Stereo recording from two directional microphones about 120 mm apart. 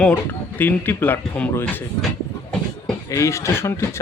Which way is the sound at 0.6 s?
15° left (ahead or behind).